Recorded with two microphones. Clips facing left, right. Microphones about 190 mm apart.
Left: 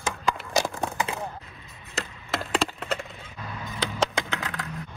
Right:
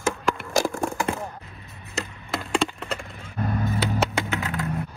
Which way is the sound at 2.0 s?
Centre (ahead or behind).